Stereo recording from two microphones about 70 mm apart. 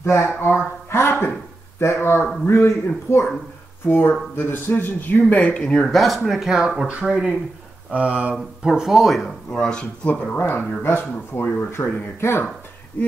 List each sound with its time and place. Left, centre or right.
0.4 s gasp: left
1.8 s a man's voice: left; by 5.9 s centre
5.9 s speech: centre
8.6 s speech: centre
9.5 s speech: centre
10.3 s speech: left